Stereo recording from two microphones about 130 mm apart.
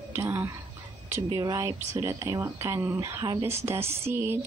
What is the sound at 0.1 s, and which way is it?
Speech, 20° right (ahead or behind).